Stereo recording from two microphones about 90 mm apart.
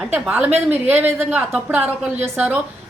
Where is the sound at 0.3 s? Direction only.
15° right (ahead or behind).